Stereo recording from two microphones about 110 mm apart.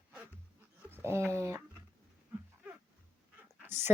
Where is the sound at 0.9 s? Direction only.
20° right (ahead or behind).